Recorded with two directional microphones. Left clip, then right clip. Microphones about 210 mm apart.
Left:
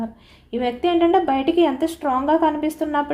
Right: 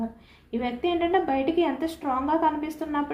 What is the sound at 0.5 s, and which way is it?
A woman's voice, 50° left (ahead or behind).